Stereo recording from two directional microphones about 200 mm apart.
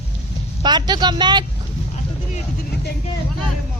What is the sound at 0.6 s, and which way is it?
Speech, 20° right (ahead or behind).